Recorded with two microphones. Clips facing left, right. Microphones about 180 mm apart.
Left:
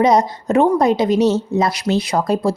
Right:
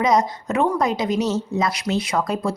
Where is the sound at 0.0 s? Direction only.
30° left (ahead or behind).